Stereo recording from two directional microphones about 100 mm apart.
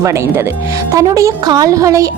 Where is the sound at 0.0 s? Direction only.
30° right (ahead or behind).